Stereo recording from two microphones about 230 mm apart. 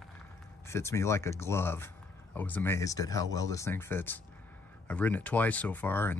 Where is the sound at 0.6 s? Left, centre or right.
Centre.